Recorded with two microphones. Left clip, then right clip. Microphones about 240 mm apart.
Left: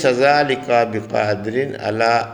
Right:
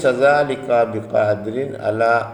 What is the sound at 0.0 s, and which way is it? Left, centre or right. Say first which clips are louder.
A man's voice: even; left.